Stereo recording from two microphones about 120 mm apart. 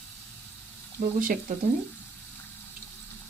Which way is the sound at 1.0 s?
90° right.